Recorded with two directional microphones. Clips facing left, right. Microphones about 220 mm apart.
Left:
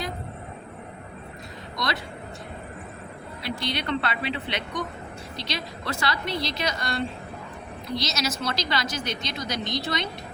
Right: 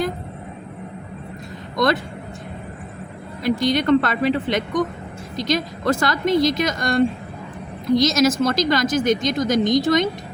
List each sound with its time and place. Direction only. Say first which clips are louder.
1.7 s speech: right 11 dB; 50° right (ahead or behind)
3.4 s speech: right 12 dB; 45° right (ahead or behind)